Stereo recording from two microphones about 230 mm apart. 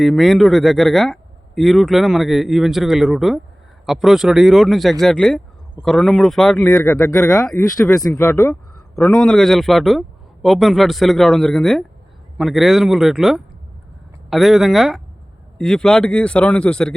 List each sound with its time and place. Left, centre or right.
0.0 s speech: centre